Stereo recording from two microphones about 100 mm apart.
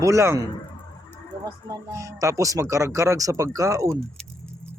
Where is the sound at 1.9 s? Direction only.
30° right (ahead or behind).